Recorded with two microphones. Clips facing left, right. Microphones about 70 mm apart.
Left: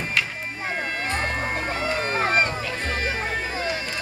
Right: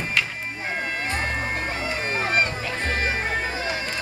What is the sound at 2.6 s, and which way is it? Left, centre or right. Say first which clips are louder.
Music: right 1 dB; right.